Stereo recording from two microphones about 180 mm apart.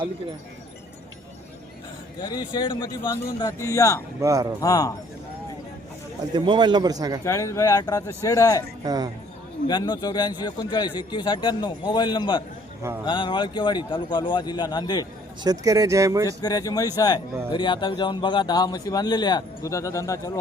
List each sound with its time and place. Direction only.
2.5 s speech: 25° left (ahead or behind)
4.2 s a man's voice: 20° right (ahead or behind)
4.6 s speech: 20° left (ahead or behind)
6.3 s speech: 25° right (ahead or behind)
7.3 s speech: 15° left (ahead or behind)
8.8 s a man's voice: 20° right (ahead or behind)
9.6 s speech: 25° left (ahead or behind)
15.4 s speech: 20° right (ahead or behind)
16.4 s speech: 20° left (ahead or behind)